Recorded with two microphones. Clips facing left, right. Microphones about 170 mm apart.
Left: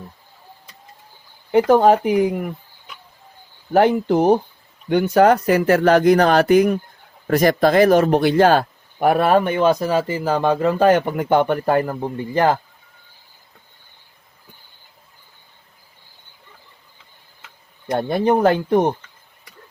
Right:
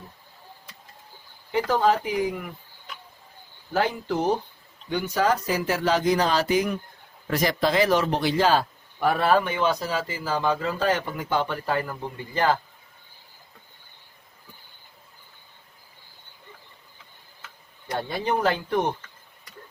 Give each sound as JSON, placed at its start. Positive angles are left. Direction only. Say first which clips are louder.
{"t": 1.5, "sound": "speech", "louder": "left 9 dB", "side_deg": 55}
{"t": 3.7, "sound": "speech", "louder": "left 10 dB", "side_deg": 60}
{"t": 17.9, "sound": "speech", "louder": "left 9 dB", "side_deg": 50}